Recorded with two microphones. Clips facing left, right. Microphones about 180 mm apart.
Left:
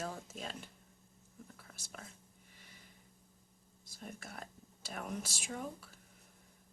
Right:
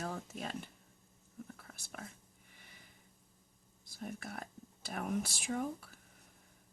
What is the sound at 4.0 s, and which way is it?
Speech, 55° right (ahead or behind).